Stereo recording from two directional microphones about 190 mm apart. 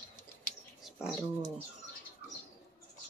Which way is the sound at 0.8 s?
5° right (ahead or behind).